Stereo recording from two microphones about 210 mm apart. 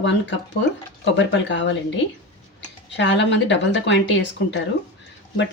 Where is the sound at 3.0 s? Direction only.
60° left (ahead or behind).